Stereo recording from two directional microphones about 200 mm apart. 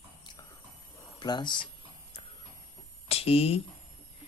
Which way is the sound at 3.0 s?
30° left (ahead or behind).